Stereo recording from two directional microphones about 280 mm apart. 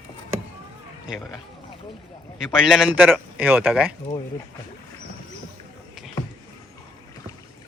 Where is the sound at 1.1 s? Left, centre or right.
Centre.